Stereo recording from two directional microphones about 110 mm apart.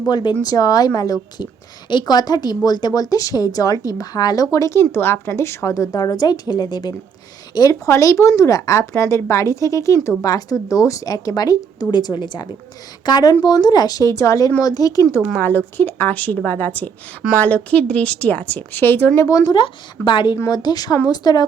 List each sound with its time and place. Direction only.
0.1 s a woman's voice: 45° left (ahead or behind)
0.4 s speech: 35° left (ahead or behind)
15.4 s a woman's voice: 20° left (ahead or behind)
19.5 s a woman's voice: 45° left (ahead or behind)